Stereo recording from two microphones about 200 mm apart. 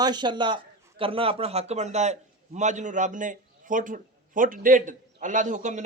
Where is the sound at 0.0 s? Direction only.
20° right (ahead or behind).